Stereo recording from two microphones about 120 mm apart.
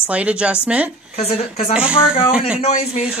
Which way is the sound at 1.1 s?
60° left (ahead or behind).